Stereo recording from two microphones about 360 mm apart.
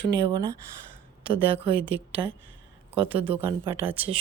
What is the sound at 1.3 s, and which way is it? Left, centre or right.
Speech, centre.